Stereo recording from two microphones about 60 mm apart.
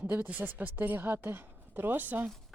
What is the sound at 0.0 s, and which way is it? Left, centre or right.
A woman's voice, right.